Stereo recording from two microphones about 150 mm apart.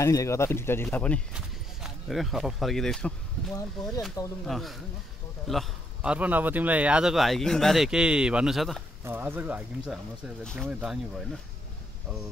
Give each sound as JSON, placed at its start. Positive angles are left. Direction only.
{"t": 0.0, "sound": "speech", "side_deg": 20}
{"t": 1.3, "sound": "speech", "side_deg": 0}
{"t": 4.5, "sound": "a man's voice", "side_deg": 0}
{"t": 6.1, "sound": "speech", "side_deg": -10}
{"t": 9.0, "sound": "speech", "side_deg": -15}
{"t": 10.4, "sound": "speech", "side_deg": 5}
{"t": 10.7, "sound": "speech", "side_deg": -5}